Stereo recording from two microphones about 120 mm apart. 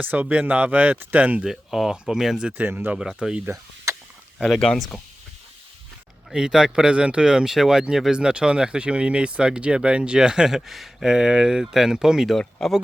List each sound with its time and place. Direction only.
0.0 s speech: 15° right (ahead or behind)
2.5 s speech: 15° right (ahead or behind)
3.4 s speech: 25° right (ahead or behind)
4.4 s speech: centre (ahead or behind)
6.3 s speech: 5° right (ahead or behind)